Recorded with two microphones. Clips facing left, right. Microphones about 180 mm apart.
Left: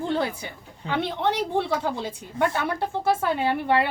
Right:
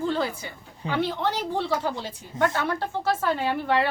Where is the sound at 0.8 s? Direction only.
15° right (ahead or behind).